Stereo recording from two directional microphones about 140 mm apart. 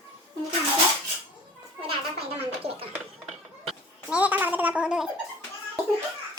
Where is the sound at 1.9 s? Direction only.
45° right (ahead or behind).